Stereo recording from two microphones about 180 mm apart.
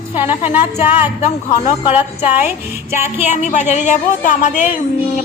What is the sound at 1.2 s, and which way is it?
Speech, 40° left (ahead or behind).